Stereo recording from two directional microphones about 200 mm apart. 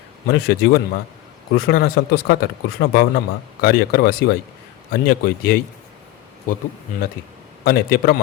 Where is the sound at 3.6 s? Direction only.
50° left (ahead or behind).